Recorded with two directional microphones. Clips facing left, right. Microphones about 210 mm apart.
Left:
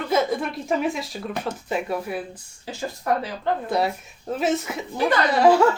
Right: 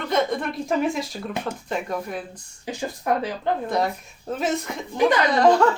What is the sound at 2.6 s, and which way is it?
Speech, 15° right (ahead or behind).